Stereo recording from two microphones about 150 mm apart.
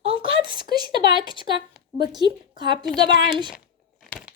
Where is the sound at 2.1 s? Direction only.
30° right (ahead or behind).